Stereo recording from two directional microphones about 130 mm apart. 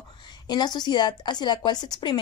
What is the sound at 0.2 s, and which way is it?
Speech, 35° left (ahead or behind).